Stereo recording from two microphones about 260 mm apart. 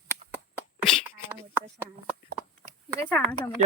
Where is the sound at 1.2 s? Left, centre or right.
Centre.